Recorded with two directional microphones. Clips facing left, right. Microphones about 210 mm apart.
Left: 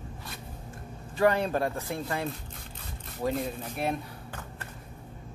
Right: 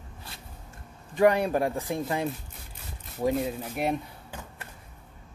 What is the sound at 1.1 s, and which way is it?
Speech, 15° right (ahead or behind).